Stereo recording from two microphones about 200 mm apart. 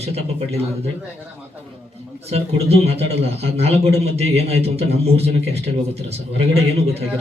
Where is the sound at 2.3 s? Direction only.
30° right (ahead or behind).